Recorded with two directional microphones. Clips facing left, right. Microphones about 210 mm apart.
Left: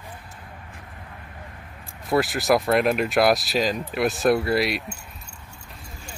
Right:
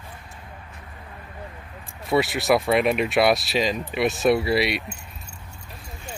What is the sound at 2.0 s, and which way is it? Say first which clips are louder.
Speech: even; centre (ahead or behind).